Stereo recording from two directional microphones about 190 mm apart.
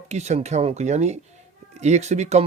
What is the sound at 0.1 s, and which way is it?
Speech, 35° right (ahead or behind).